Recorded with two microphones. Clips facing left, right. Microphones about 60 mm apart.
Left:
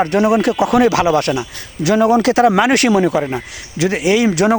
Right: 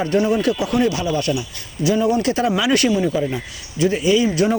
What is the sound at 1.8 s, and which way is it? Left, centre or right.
Speech, left.